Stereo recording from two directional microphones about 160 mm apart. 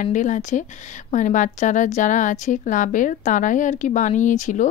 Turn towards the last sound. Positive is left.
turn(degrees=50)  # may be behind; listen again after turning